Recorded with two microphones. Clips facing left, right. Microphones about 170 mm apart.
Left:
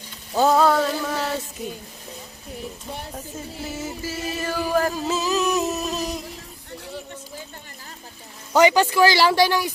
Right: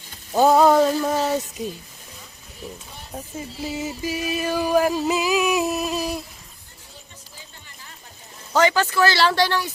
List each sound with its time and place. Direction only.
0.3 s a sound: 15° right (ahead or behind)
3.3 s music: 15° right (ahead or behind)
8.5 s speech: 15° left (ahead or behind)